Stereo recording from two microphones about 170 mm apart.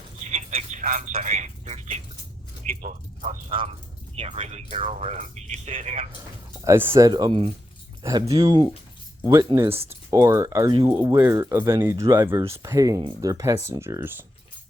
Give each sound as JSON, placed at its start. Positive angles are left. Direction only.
{"t": 0.3, "sound": "keys jangling", "side_deg": -40}
{"t": 0.8, "sound": "speech", "side_deg": -50}
{"t": 3.6, "sound": "speech", "side_deg": -35}
{"t": 6.7, "sound": "speech", "side_deg": -15}
{"t": 9.9, "sound": "speech", "side_deg": -20}
{"t": 10.7, "sound": "speech", "side_deg": -30}
{"t": 10.9, "sound": "speech", "side_deg": -15}